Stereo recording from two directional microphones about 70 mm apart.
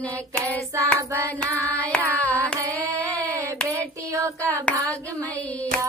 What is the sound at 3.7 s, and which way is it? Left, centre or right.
Child singing, right.